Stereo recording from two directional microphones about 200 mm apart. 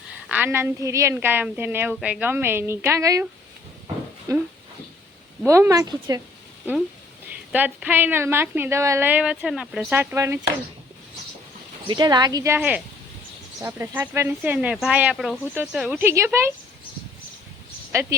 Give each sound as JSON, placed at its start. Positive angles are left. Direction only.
{"t": 0.3, "sound": "a woman's voice", "side_deg": -10}
{"t": 4.3, "sound": "a woman's voice", "side_deg": -15}
{"t": 5.5, "sound": "a woman's voice", "side_deg": -15}
{"t": 7.3, "sound": "a woman's voice", "side_deg": -10}
{"t": 11.9, "sound": "a woman's voice", "side_deg": -20}